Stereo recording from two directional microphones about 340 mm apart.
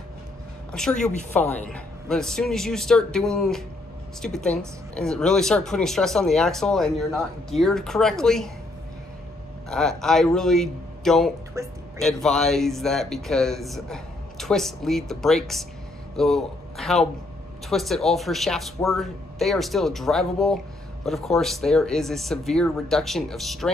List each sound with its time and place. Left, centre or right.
0.7 s speech: centre
9.7 s speech: centre